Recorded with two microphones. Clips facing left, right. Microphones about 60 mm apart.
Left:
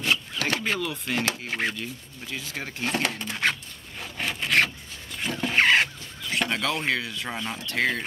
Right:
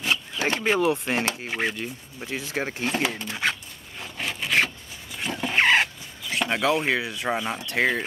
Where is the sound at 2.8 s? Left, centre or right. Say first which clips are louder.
Left 2 dB; centre.